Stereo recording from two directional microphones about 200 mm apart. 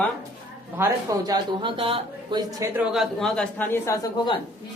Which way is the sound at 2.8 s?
Centre (ahead or behind).